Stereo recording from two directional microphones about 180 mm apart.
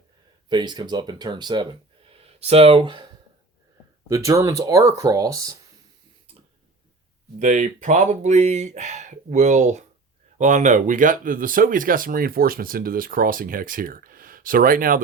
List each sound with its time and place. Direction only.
0.4 s speech: 25° right (ahead or behind)
4.1 s speech: 15° right (ahead or behind)
7.3 s speech: 45° right (ahead or behind)